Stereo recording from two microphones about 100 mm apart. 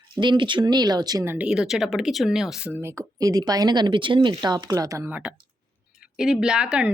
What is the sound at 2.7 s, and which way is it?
Speech, 30° right (ahead or behind).